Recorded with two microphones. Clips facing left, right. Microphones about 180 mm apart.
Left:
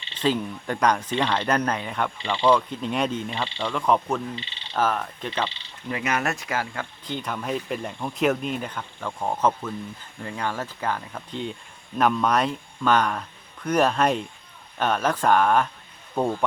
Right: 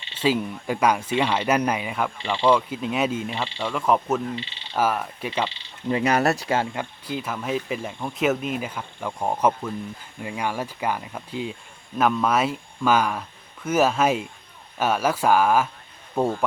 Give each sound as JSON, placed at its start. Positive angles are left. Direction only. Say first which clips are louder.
{"t": 0.1, "sound": "speech", "louder": "right 1 dB", "side_deg": -5}
{"t": 5.9, "sound": "speech", "louder": "right 6 dB", "side_deg": -35}
{"t": 6.7, "sound": "speech", "louder": "right 2 dB", "side_deg": -5}